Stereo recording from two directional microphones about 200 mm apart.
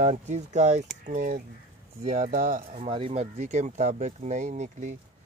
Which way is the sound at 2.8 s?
25° right (ahead or behind).